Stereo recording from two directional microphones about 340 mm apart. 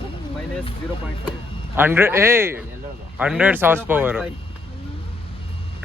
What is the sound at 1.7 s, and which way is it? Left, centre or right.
Speech, centre.